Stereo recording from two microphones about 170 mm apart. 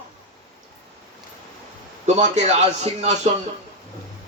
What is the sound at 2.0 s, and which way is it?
A man's voice, 45° right (ahead or behind).